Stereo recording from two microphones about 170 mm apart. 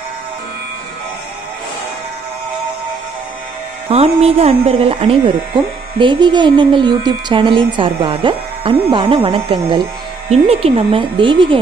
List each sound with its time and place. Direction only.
3.9 s speech: 40° right (ahead or behind)